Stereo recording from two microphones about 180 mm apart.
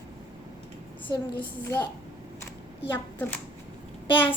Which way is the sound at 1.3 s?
10° left (ahead or behind).